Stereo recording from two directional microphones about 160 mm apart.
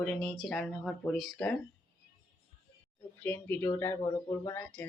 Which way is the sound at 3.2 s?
15° left (ahead or behind).